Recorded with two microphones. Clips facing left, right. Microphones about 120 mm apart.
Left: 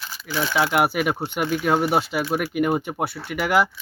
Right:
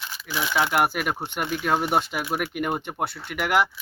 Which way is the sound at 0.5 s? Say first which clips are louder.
Left 2 dB; centre (ahead or behind).